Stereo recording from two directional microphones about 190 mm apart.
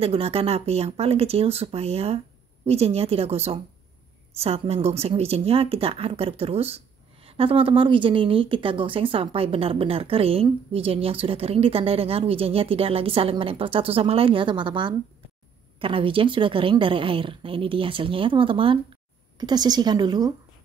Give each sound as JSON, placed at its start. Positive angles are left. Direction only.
{"t": 0.0, "sound": "a woman's voice", "side_deg": -30}